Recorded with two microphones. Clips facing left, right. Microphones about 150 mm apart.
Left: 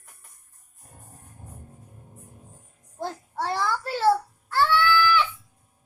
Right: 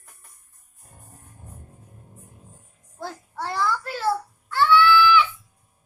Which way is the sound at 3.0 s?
20° left (ahead or behind).